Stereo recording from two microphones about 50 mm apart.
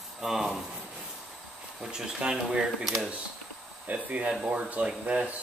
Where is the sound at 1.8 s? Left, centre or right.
Centre.